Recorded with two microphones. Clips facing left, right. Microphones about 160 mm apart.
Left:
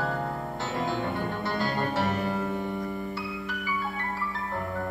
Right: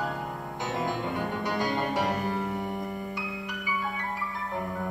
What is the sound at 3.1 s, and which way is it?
Music, 15° right (ahead or behind).